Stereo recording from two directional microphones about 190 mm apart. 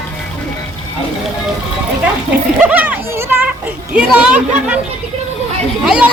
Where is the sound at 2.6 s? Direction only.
10° right (ahead or behind).